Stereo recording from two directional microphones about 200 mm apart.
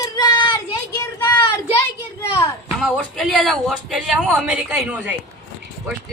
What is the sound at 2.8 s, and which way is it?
A woman's voice, centre (ahead or behind).